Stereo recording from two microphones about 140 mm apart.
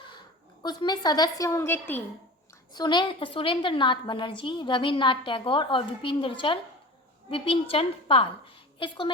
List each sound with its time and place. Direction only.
0.6 s a woman's voice: 30° left (ahead or behind)
2.7 s a woman's voice: 30° left (ahead or behind)